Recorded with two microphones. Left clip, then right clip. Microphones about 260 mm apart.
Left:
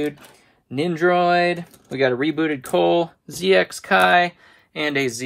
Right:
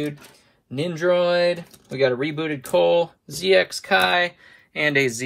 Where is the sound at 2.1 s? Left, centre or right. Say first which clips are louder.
Left 4 dB; left.